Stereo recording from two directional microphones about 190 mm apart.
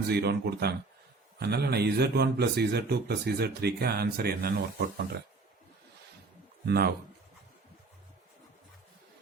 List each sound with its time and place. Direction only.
0.1 s a man's voice: 60° right (ahead or behind)
6.7 s a man's voice: 60° right (ahead or behind)